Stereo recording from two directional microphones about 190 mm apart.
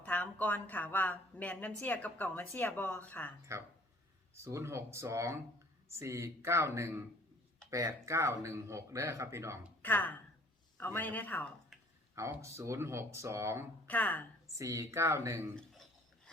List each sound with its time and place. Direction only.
0.0 s a woman's voice: 10° left (ahead or behind)
4.4 s speech: 15° right (ahead or behind)
9.8 s a woman's voice: 10° left (ahead or behind)
12.1 s speech: 15° right (ahead or behind)
13.8 s a woman's voice: 10° left (ahead or behind)
14.6 s speech: 15° right (ahead or behind)
15.5 s a sound: 5° left (ahead or behind)